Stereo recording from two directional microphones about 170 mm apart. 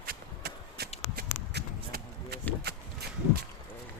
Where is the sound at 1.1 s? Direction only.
65° right (ahead or behind).